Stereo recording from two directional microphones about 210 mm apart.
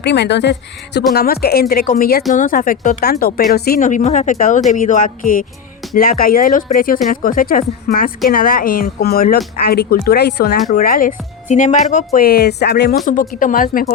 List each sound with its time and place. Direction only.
0.0 s a woman's voice: 55° left (ahead or behind)
13.1 s speech: 40° left (ahead or behind)